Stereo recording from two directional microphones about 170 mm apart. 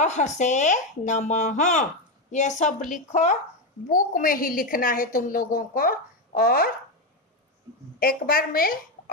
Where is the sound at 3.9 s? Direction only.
55° left (ahead or behind).